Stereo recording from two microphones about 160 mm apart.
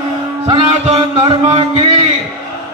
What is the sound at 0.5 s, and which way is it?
A man's voice, 35° right (ahead or behind).